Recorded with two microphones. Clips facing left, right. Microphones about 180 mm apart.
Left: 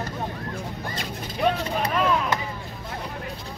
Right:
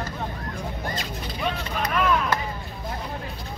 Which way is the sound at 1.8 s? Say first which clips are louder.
Even; 30° left (ahead or behind).